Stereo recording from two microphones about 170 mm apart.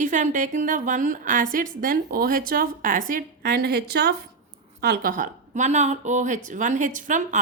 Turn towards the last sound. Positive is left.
turn(degrees=-50)  # may be behind; listen again after turning